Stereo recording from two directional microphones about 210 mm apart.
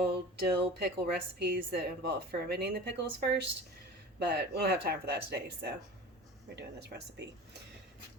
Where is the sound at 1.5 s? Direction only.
45° right (ahead or behind).